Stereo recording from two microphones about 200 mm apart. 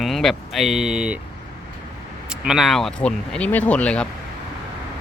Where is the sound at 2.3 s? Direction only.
5° right (ahead or behind).